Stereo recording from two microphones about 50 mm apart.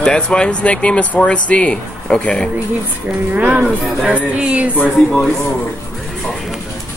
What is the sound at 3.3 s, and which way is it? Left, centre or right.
A woman's voice, right.